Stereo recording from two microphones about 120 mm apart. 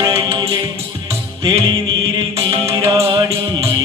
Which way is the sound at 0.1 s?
40° right (ahead or behind).